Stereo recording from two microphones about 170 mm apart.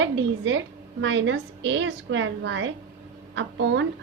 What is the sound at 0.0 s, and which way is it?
A woman's voice, 90° right.